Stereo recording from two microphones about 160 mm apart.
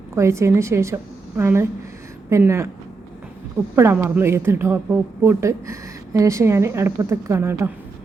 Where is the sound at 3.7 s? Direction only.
15° right (ahead or behind).